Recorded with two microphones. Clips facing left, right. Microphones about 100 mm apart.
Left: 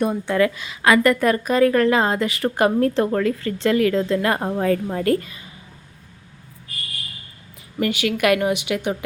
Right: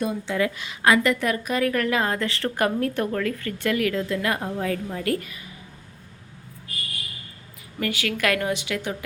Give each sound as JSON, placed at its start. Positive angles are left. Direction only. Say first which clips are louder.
{"t": 0.0, "sound": "a woman's voice", "louder": "left 5 dB", "side_deg": 55}
{"t": 1.0, "sound": "a woman's voice", "louder": "left 6 dB", "side_deg": 45}
{"t": 5.1, "sound": "a woman's voice", "louder": "left 6 dB", "side_deg": 30}
{"t": 7.8, "sound": "a woman's voice", "louder": "left 5 dB", "side_deg": 20}